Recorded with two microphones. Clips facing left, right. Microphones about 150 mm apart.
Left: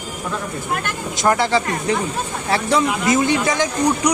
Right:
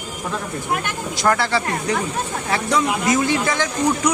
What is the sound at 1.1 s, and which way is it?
Speech, 20° left (ahead or behind).